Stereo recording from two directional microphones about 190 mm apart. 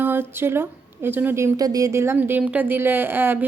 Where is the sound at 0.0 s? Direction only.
10° right (ahead or behind).